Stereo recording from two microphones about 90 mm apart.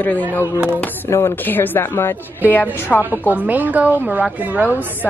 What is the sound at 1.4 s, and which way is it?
A woman's voice, 20° left (ahead or behind).